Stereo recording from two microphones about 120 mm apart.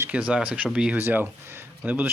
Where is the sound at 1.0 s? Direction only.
20° right (ahead or behind).